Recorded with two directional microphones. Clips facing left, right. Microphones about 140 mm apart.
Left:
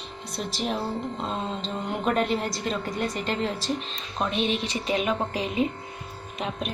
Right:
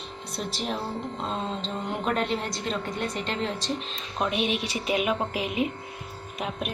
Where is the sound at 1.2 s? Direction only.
5° left (ahead or behind).